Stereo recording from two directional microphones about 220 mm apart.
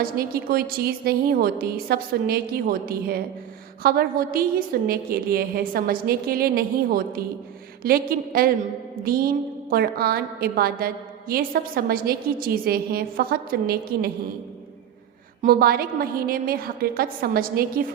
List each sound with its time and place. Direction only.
0.0 s a woman's voice: 45° right (ahead or behind)
15.4 s a woman's voice: 40° right (ahead or behind)